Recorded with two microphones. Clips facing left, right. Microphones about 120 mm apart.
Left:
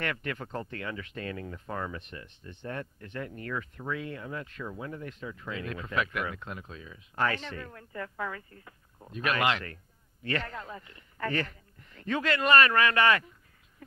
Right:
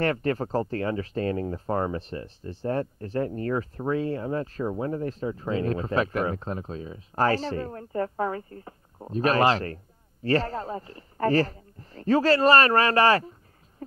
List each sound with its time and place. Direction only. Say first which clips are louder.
0.0 s speech: right 9 dB; 35° right (ahead or behind)